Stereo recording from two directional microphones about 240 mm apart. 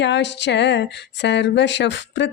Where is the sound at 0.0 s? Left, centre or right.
Left.